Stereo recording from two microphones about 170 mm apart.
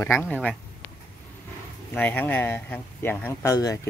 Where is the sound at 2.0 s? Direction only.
10° left (ahead or behind).